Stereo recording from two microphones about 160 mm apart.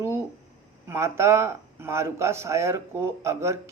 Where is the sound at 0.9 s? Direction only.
15° right (ahead or behind).